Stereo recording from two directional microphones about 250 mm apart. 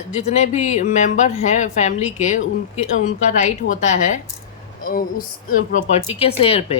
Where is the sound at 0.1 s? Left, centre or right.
Left.